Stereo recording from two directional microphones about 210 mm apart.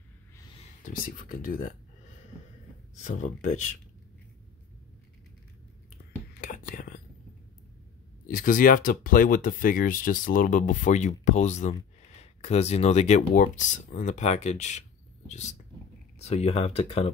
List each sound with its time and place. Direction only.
0.8 s speech: 40° left (ahead or behind)
3.0 s speech: 35° left (ahead or behind)
6.4 s whispering: 40° left (ahead or behind)
8.3 s speech: 40° left (ahead or behind)